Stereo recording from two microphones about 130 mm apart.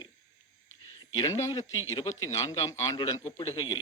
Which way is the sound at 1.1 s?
25° left (ahead or behind).